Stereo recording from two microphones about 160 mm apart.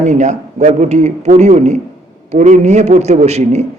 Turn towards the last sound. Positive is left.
turn(degrees=-45)  # may be behind; listen again after turning